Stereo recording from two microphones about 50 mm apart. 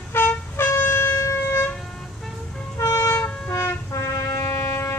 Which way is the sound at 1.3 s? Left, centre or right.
Left.